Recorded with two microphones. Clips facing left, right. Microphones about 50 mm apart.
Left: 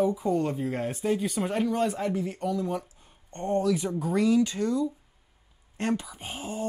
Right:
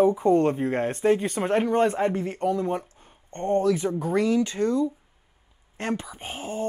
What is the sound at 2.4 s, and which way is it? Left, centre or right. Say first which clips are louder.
Speech: right 4 dB; right.